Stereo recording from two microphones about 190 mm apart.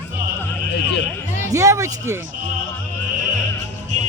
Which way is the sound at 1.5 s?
15° right (ahead or behind).